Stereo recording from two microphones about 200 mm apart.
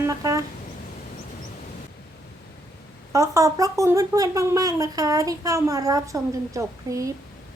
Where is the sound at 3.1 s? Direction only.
15° right (ahead or behind).